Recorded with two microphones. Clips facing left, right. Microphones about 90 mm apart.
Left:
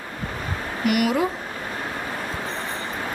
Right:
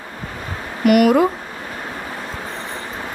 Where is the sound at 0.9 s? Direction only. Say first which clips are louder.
Right 9 dB; 55° right (ahead or behind).